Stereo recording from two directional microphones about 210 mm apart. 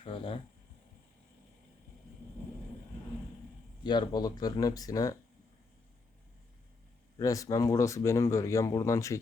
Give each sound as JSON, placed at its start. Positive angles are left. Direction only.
{"t": 0.0, "sound": "a sound", "side_deg": 25}
{"t": 3.8, "sound": "speech", "side_deg": 20}
{"t": 7.2, "sound": "speech", "side_deg": 15}